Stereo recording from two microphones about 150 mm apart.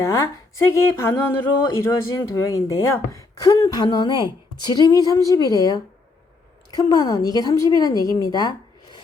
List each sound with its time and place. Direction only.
0.0 s speech: 20° left (ahead or behind)